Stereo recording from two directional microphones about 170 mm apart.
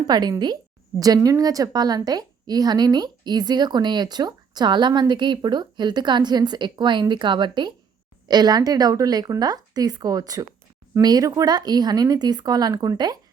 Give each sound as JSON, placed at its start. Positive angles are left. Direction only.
{"t": 0.1, "sound": "a woman's voice", "side_deg": -25}